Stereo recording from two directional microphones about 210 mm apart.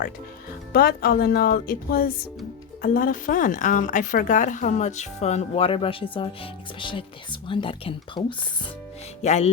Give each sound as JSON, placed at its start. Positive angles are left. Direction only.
{"t": 0.7, "sound": "a woman's voice", "side_deg": 45}